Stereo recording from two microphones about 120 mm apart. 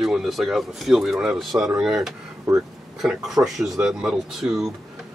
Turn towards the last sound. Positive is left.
turn(degrees=0)  # may be behind; listen again after turning